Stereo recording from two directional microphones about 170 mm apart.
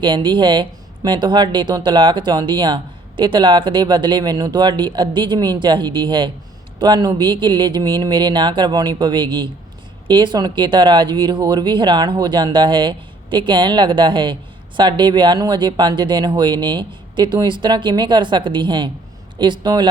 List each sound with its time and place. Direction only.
0.0 s speech: 30° right (ahead or behind)